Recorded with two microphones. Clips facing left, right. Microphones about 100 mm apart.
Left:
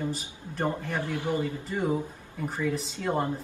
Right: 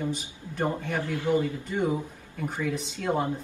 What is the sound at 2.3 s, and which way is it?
Speech, centre (ahead or behind).